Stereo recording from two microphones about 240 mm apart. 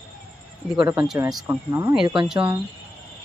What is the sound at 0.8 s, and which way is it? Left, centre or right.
Speech, centre.